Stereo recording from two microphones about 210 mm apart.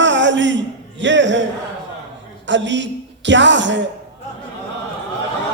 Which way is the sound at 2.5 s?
60° right (ahead or behind).